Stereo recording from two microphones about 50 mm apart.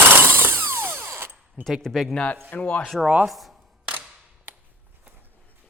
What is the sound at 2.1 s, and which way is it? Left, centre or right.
Speech, left.